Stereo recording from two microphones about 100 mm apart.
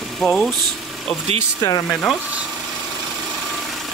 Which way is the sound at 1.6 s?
35° left (ahead or behind).